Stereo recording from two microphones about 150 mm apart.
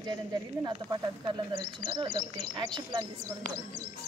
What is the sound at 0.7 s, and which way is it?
Speech, 30° right (ahead or behind).